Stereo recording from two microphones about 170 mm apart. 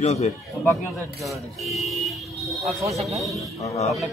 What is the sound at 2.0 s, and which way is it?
Vehicle, centre (ahead or behind).